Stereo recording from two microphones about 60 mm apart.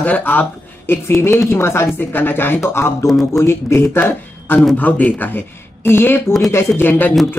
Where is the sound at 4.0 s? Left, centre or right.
Left.